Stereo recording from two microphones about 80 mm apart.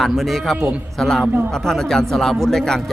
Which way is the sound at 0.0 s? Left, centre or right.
Centre.